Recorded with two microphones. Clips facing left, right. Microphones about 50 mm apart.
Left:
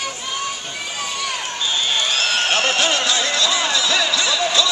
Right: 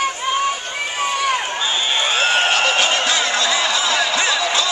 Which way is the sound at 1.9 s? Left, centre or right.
Right.